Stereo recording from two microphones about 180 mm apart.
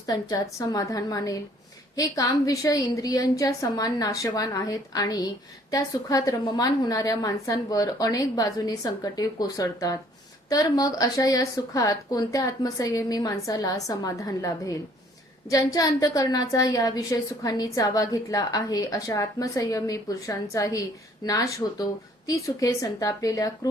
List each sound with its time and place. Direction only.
0.0 s a woman's voice: 20° left (ahead or behind)